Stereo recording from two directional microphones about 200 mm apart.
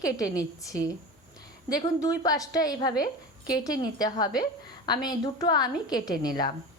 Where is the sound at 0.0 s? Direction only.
15° left (ahead or behind).